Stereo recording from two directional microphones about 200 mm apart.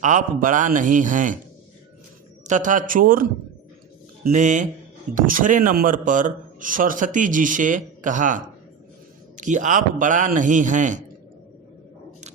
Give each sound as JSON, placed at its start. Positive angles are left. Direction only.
{"t": 0.0, "sound": "speech", "side_deg": -40}
{"t": 2.5, "sound": "speech", "side_deg": -40}